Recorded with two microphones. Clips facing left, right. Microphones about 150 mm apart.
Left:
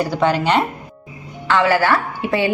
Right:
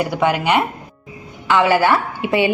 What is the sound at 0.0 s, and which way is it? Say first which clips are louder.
A woman's voice: even; 10° right (ahead or behind).